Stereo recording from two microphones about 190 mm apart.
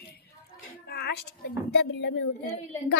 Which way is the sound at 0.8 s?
55° left (ahead or behind).